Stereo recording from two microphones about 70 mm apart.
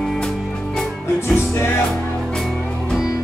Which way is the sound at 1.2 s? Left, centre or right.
Left.